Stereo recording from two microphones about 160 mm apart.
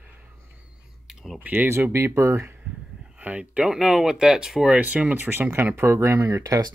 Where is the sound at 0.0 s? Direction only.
10° right (ahead or behind).